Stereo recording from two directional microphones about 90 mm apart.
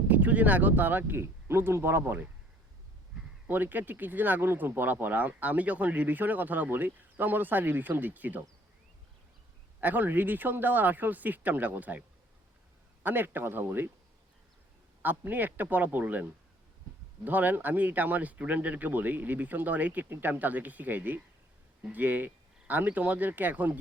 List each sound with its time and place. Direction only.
0.1 s speech: 15° right (ahead or behind)
3.4 s speech: 20° right (ahead or behind)
9.8 s speech: 20° right (ahead or behind)
15.0 s speech: 20° right (ahead or behind)